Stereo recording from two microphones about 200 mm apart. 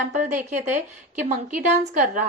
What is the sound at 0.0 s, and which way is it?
Speech, 35° right (ahead or behind).